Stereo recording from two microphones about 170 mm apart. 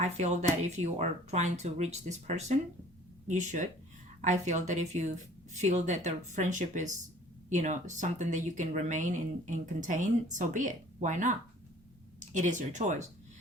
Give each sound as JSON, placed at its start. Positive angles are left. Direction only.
{"t": 0.8, "sound": "speech", "side_deg": -40}